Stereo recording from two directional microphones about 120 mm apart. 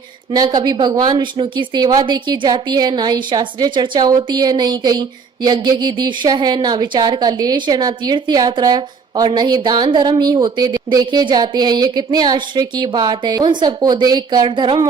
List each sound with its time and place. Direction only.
0.3 s speech: 40° right (ahead or behind)